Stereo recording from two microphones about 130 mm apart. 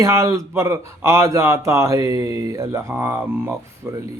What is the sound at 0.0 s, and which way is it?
A man's voice, 25° right (ahead or behind).